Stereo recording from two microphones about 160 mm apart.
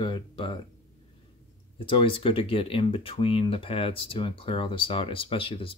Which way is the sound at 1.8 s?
35° left (ahead or behind).